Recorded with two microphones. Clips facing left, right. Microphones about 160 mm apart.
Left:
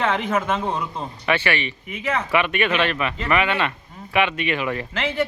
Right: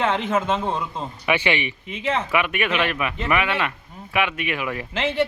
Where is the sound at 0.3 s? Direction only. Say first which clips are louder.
Even; 25° right (ahead or behind).